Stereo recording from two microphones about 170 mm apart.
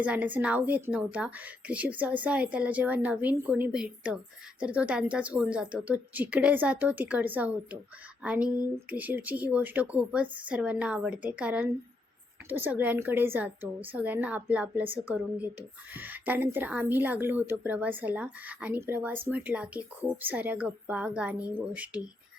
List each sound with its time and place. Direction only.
0.0 s a woman's voice: 10° right (ahead or behind)